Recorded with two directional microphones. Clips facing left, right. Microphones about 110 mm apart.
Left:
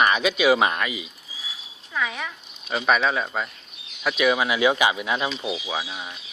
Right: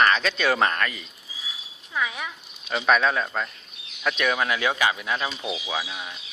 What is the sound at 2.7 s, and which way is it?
Speech, 5° left (ahead or behind).